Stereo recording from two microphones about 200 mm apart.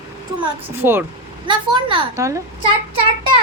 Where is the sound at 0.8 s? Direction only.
10° right (ahead or behind).